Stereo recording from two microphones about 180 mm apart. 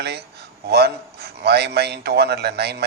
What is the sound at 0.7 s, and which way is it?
A man's voice, 65° right (ahead or behind).